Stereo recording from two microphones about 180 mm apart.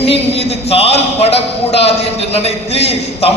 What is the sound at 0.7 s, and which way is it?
A man's voice, 35° left (ahead or behind).